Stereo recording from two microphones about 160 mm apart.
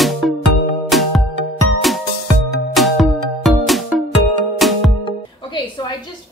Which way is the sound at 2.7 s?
Centre (ahead or behind).